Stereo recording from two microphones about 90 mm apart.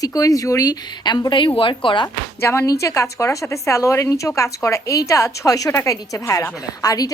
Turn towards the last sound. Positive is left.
turn(degrees=40)  # may be behind; listen again after turning